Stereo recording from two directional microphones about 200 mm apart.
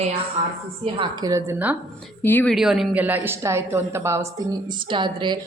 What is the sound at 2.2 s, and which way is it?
Speech, 10° left (ahead or behind).